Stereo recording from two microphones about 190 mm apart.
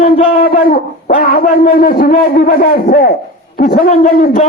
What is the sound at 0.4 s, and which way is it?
A man's voice, 50° left (ahead or behind).